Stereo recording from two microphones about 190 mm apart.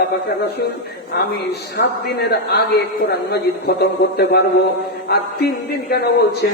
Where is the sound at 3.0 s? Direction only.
60° left (ahead or behind).